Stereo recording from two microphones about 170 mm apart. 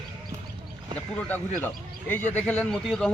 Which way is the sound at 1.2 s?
10° left (ahead or behind).